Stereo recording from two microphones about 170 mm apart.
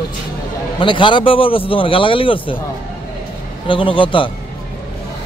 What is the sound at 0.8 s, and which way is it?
A man's voice, 30° left (ahead or behind).